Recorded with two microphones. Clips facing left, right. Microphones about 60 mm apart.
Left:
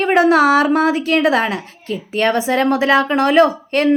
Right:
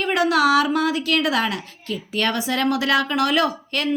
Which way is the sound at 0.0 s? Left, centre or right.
Left.